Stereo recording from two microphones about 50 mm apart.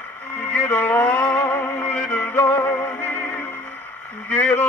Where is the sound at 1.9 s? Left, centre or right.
Left.